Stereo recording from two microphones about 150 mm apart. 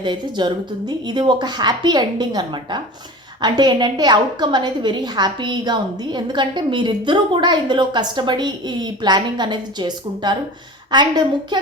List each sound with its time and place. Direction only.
0.0 s a woman's voice: 30° right (ahead or behind)